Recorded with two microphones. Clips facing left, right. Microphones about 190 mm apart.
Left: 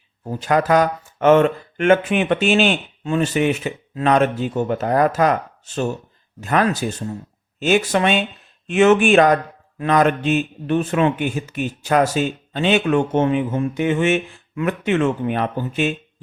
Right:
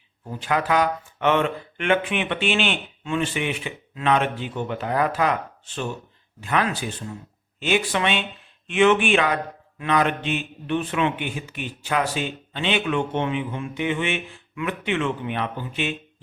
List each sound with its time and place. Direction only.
0.3 s speech: 40° left (ahead or behind)